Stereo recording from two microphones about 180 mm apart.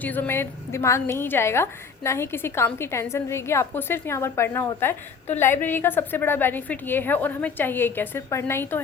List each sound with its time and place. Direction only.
0.0 s a woman's voice: 10° left (ahead or behind)